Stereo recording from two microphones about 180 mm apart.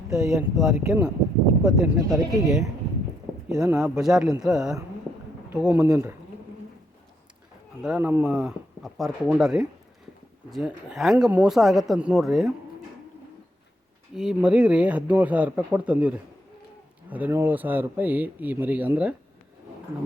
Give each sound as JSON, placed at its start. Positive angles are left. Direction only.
{"t": 0.1, "sound": "speech", "side_deg": -5}
{"t": 7.8, "sound": "speech", "side_deg": -5}
{"t": 14.2, "sound": "speech", "side_deg": -5}